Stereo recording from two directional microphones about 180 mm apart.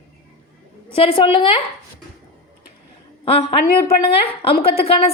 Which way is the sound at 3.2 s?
30° left (ahead or behind).